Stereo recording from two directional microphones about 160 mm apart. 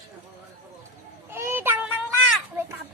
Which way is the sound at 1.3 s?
15° right (ahead or behind).